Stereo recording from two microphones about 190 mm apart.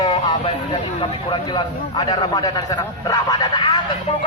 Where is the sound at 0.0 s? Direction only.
25° left (ahead or behind).